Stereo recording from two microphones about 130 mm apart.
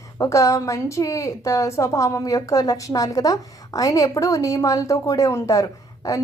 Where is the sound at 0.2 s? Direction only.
25° left (ahead or behind).